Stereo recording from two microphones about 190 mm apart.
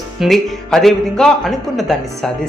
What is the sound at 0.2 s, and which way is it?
Speech, centre (ahead or behind).